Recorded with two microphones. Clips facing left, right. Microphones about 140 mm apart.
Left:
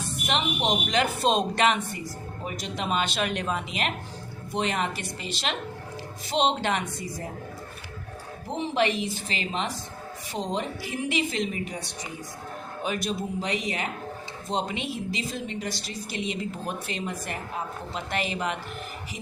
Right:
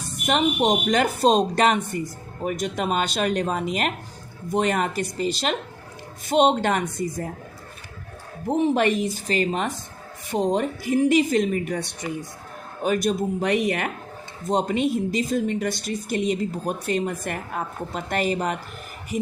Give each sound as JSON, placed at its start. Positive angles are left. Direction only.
{"t": 0.3, "sound": "speech", "side_deg": -45}
{"t": 8.4, "sound": "speech", "side_deg": -50}
{"t": 12.8, "sound": "speech", "side_deg": -45}
{"t": 14.4, "sound": "speech", "side_deg": -45}